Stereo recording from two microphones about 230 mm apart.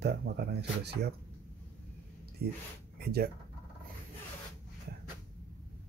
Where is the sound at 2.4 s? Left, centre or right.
Right.